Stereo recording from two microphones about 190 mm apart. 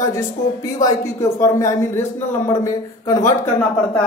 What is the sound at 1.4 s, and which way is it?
A man's voice, 15° left (ahead or behind).